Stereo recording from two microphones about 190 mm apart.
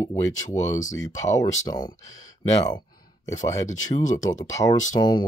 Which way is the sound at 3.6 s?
40° left (ahead or behind).